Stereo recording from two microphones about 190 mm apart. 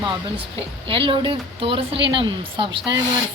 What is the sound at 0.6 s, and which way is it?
A woman's voice, 30° right (ahead or behind).